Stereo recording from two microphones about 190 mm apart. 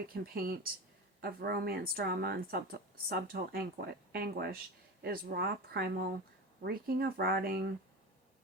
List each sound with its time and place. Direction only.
0.1 s speech: 50° right (ahead or behind)